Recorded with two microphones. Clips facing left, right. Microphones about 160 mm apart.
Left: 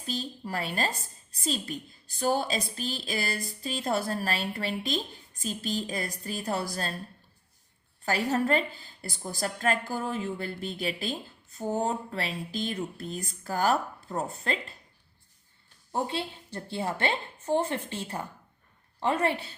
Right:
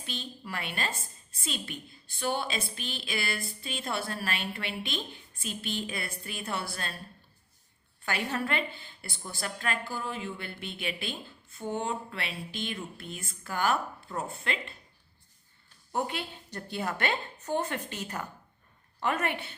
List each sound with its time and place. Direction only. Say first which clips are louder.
0.0 s a woman's voice: left 5 dB; 40° left (ahead or behind)
8.0 s a woman's voice: left 5 dB; 40° left (ahead or behind)
15.9 s a woman's voice: left 2 dB; 30° left (ahead or behind)